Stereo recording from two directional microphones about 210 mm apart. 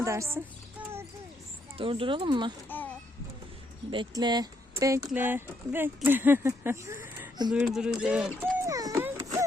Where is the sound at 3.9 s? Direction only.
20° right (ahead or behind).